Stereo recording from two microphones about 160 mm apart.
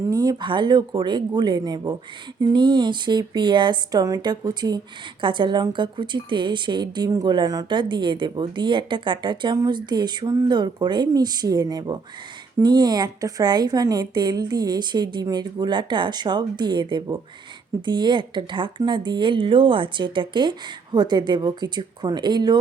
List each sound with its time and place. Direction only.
0.1 s a woman's voice: 25° right (ahead or behind)